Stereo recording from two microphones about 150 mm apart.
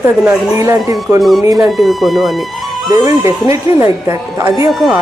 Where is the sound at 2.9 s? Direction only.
20° right (ahead or behind).